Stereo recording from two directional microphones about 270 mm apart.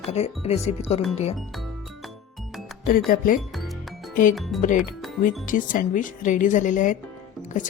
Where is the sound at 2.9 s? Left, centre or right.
Left.